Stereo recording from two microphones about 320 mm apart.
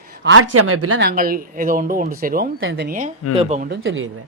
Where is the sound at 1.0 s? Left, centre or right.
Right.